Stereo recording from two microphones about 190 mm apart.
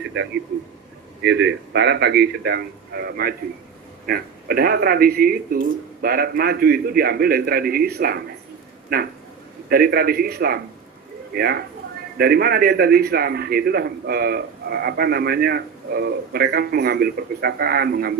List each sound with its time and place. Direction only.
1.2 s a man's voice: 65° right (ahead or behind)